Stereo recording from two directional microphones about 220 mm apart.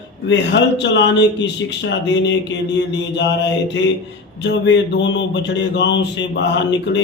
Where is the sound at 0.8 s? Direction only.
55° left (ahead or behind).